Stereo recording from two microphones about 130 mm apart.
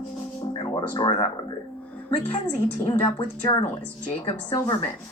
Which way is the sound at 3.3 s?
20° left (ahead or behind).